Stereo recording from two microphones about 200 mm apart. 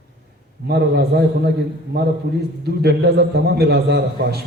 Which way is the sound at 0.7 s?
55° right (ahead or behind).